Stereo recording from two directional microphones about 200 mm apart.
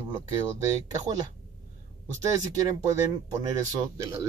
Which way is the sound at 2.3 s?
15° right (ahead or behind).